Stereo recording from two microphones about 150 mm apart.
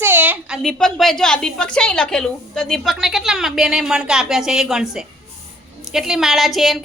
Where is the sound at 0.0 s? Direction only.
15° right (ahead or behind).